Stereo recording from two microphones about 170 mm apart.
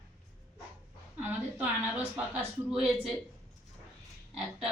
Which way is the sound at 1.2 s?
10° right (ahead or behind).